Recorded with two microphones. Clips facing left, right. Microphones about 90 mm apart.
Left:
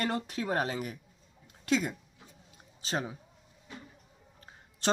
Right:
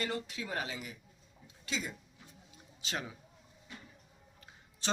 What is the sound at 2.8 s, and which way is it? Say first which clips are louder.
Speech: left 6 dB; 35° left (ahead or behind).